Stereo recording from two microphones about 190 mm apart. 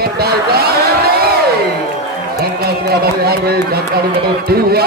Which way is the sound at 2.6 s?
55° right (ahead or behind).